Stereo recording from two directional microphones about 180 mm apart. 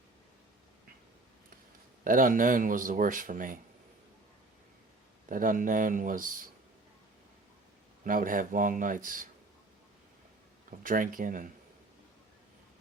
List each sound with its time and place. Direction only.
2.0 s speech: 50° right (ahead or behind)
5.3 s speech: 50° right (ahead or behind)
8.0 s speech: 50° right (ahead or behind)
10.7 s speech: 50° right (ahead or behind)